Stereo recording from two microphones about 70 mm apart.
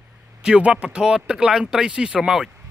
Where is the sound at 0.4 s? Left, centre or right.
Centre.